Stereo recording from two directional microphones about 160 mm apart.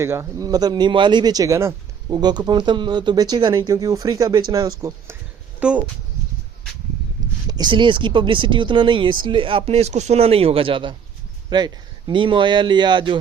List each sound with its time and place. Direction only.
0.0 s speech: 15° right (ahead or behind)
5.5 s speech: 10° right (ahead or behind)
7.4 s speech: 25° right (ahead or behind)